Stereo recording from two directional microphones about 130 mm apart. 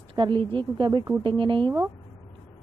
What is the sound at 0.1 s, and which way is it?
Speech, 40° right (ahead or behind).